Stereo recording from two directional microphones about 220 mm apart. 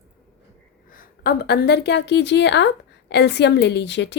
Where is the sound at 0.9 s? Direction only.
45° left (ahead or behind).